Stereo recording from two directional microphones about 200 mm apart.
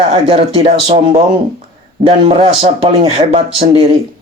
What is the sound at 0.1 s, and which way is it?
Speech, 25° right (ahead or behind).